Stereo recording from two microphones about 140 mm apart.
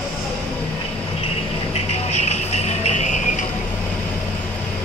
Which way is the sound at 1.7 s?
50° left (ahead or behind).